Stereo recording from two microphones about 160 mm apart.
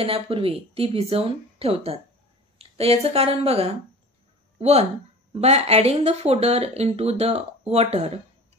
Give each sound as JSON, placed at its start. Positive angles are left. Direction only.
{"t": 0.0, "sound": "speech", "side_deg": -35}